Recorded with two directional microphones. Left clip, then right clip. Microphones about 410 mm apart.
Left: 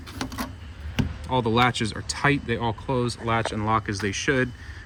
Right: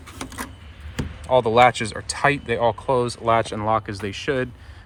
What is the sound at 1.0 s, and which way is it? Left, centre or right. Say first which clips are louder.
Speech: right 7 dB; centre.